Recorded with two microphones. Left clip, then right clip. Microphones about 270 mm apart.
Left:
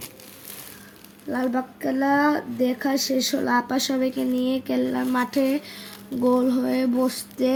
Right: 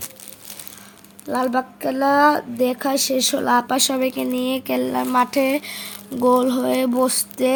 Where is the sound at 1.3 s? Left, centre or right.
Right.